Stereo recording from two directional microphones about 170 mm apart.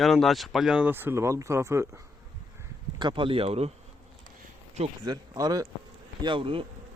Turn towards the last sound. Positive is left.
turn(degrees=-30)  # may be behind; listen again after turning